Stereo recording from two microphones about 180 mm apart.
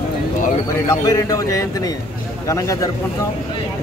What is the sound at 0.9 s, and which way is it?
Speech, 20° left (ahead or behind).